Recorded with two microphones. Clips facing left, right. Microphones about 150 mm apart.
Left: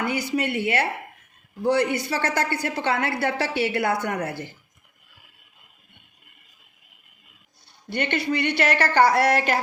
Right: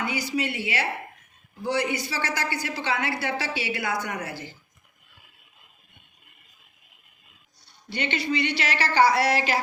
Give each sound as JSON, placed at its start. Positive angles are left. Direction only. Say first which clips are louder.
{"t": 0.0, "sound": "a woman's voice", "louder": "left 3 dB", "side_deg": 55}
{"t": 7.9, "sound": "a woman's voice", "louder": "left 3 dB", "side_deg": 55}